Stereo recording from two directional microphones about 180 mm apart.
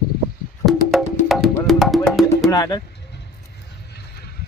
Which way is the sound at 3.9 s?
60° left (ahead or behind).